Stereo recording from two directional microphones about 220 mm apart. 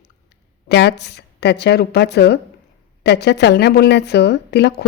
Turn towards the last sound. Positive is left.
turn(degrees=50)  # may be behind; listen again after turning